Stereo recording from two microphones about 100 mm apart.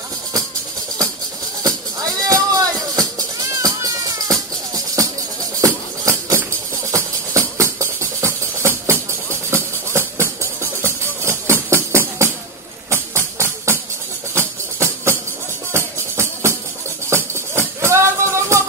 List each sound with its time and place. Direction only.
2.2 s music: 35° right (ahead or behind)
5.6 s music: 35° right (ahead or behind)